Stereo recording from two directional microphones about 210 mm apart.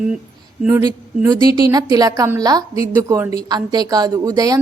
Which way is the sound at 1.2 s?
20° right (ahead or behind).